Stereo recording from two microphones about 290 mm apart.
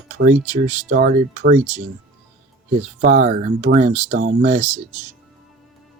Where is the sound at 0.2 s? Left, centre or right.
Right.